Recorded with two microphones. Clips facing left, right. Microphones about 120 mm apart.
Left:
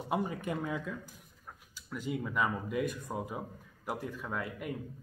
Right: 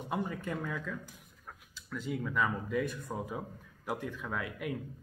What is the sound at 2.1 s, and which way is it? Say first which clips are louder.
Speech: even; 10° left (ahead or behind).